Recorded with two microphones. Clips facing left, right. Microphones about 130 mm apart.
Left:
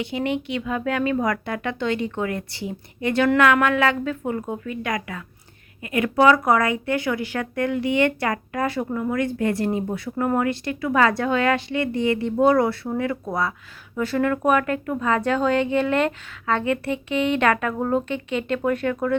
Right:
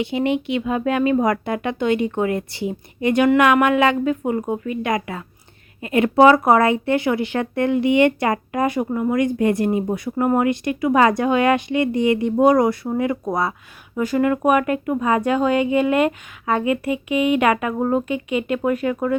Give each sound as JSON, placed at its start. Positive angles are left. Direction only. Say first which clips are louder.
{"t": 0.0, "sound": "speech", "louder": "right 4 dB", "side_deg": -20}